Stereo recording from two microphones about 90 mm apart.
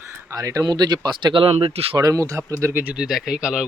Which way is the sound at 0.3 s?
40° right (ahead or behind).